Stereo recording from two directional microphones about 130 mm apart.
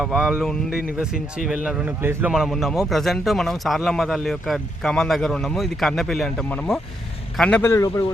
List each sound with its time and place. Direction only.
0.0 s speech: 5° right (ahead or behind)
2.3 s a man's voice: centre (ahead or behind)
7.6 s speech: 20° left (ahead or behind)